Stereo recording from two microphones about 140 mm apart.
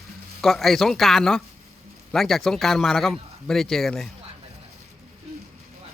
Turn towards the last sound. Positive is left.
turn(degrees=5)  # may be behind; listen again after turning